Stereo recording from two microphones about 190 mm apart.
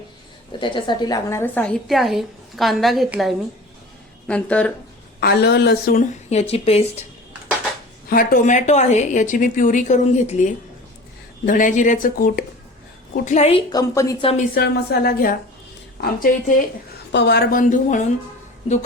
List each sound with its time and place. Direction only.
0.6 s a woman's voice: 25° left (ahead or behind); by 4.7 s 5° left (ahead or behind)
5.2 s a woman's voice: 60° left (ahead or behind)
6.3 s a woman's voice: 30° left (ahead or behind)
8.0 s a woman's voice: 50° left (ahead or behind)
13.2 s a woman's voice: 35° left (ahead or behind); by 14.3 s 20° left (ahead or behind)
14.5 s speech: 55° left (ahead or behind)
17.1 s speech: 65° left (ahead or behind); by 18.0 s 45° left (ahead or behind)